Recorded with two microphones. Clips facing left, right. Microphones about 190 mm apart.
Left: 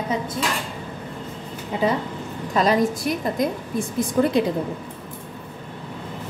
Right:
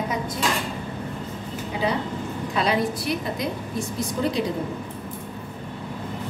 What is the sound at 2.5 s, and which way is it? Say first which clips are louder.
A woman's voice: left 4 dB; 45° left (ahead or behind).